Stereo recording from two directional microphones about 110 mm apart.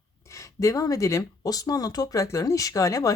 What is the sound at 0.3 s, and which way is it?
Speech, 30° left (ahead or behind).